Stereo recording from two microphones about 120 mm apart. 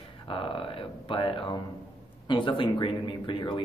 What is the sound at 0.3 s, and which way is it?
Speech, 45° left (ahead or behind).